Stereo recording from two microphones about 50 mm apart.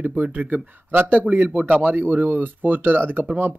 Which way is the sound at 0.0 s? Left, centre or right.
Right.